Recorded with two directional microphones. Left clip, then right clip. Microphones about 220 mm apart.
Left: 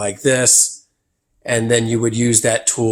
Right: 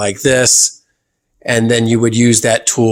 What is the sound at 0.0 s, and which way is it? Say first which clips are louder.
Speech: right 4 dB; 40° right (ahead or behind).